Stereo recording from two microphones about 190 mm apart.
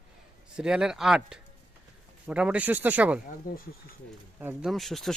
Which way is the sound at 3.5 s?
45° left (ahead or behind).